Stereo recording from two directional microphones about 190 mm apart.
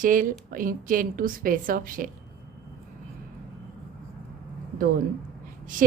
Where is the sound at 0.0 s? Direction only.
45° right (ahead or behind).